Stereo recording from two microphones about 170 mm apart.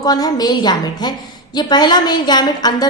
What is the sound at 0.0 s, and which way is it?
A woman's voice, 20° left (ahead or behind).